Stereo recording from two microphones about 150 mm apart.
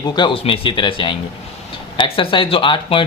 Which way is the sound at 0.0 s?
30° left (ahead or behind).